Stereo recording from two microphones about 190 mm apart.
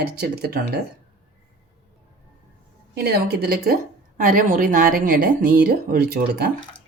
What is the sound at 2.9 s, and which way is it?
A woman's voice, 55° right (ahead or behind).